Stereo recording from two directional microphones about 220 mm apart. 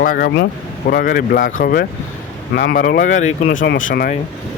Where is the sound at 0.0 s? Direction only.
40° left (ahead or behind).